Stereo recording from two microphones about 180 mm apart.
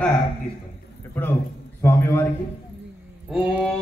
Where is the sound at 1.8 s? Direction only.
15° left (ahead or behind).